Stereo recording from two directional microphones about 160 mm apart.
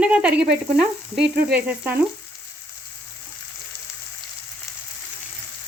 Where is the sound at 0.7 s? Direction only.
5° right (ahead or behind).